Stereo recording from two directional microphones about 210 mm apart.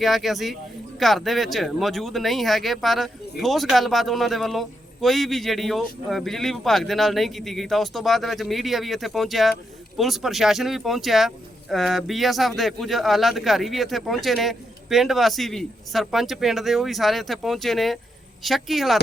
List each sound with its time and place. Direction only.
0.0 s speech: centre (ahead or behind)